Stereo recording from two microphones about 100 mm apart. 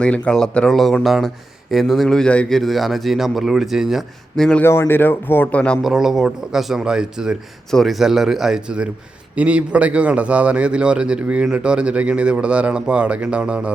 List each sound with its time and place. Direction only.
0.0 s speech: 10° left (ahead or behind)
4.6 s speech: 25° left (ahead or behind)
5.8 s a man's voice: 5° right (ahead or behind)